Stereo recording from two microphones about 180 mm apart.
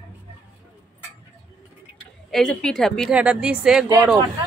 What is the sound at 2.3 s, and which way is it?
A woman's voice, 5° left (ahead or behind).